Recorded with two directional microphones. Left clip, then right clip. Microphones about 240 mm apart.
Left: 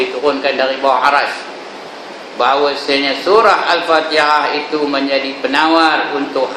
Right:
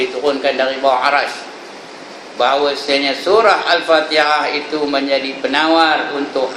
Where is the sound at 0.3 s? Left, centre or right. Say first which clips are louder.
Left 1 dB; centre.